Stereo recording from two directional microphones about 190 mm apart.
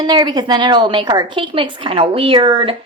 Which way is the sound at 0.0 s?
20° right (ahead or behind).